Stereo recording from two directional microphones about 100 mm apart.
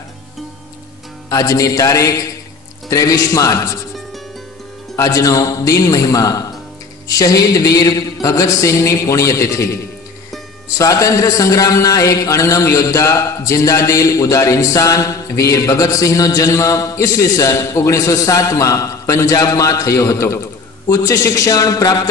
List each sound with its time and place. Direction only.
1.3 s a man's voice: 35° left (ahead or behind)
4.9 s a man's voice: 35° left (ahead or behind)
10.8 s a man's voice: 35° left (ahead or behind)